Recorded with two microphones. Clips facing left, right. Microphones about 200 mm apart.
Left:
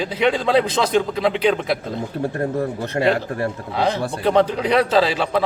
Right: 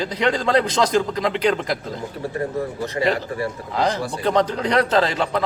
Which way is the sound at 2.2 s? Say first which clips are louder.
Left 2 dB; 55° left (ahead or behind).